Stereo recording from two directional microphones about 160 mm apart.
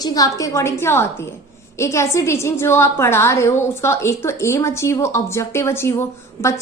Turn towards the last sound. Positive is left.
turn(degrees=15)  # may be behind; listen again after turning